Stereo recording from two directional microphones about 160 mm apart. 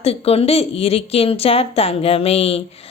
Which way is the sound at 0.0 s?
40° left (ahead or behind).